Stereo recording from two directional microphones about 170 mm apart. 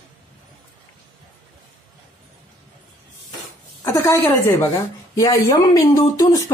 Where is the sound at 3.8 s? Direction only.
15° left (ahead or behind).